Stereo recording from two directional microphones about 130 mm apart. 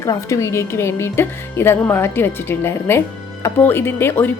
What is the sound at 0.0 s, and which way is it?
A woman's voice, 25° left (ahead or behind).